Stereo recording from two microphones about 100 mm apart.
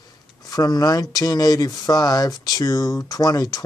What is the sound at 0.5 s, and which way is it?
Speech, 40° left (ahead or behind).